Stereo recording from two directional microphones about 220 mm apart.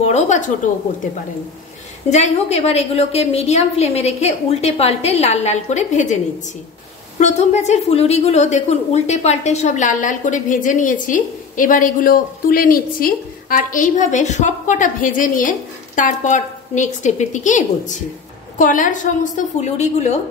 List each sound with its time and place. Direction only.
0.0 s a woman's voice: 30° left (ahead or behind)
2.0 s a woman's voice: 30° left (ahead or behind)
7.2 s a woman's voice: 30° left (ahead or behind)